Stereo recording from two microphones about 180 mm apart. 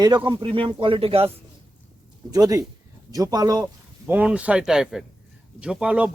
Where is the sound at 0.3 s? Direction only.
25° right (ahead or behind).